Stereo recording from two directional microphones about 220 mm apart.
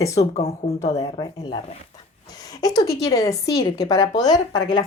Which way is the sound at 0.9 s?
15° left (ahead or behind).